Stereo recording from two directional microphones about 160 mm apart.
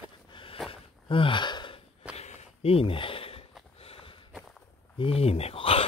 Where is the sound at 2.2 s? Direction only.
40° left (ahead or behind).